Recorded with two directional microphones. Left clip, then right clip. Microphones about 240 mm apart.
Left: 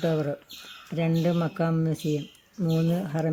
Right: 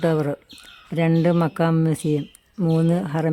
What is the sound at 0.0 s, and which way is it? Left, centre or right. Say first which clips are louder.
Speech: right 5 dB; right.